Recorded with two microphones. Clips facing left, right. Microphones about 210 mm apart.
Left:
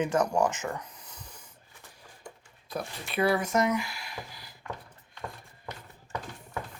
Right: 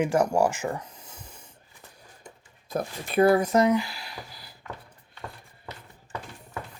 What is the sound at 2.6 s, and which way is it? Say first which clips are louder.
Speech: right 5 dB; 45° right (ahead or behind).